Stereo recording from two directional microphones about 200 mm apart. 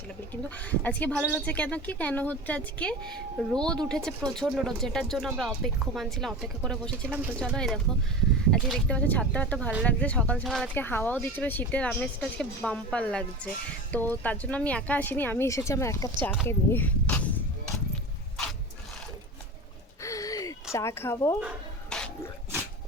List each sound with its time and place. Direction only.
0.5 s speech: 5° left (ahead or behind)
20.0 s gasp: 15° left (ahead or behind)
20.7 s speech: 15° left (ahead or behind)
21.8 s a sound: 5° left (ahead or behind)